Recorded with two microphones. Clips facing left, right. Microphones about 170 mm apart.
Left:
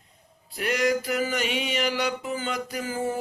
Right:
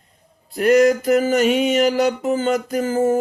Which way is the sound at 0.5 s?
45° right (ahead or behind).